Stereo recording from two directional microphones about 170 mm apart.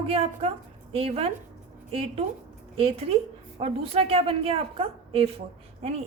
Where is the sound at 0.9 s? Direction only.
35° right (ahead or behind).